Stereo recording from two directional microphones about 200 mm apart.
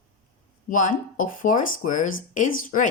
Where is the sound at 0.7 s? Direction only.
40° left (ahead or behind).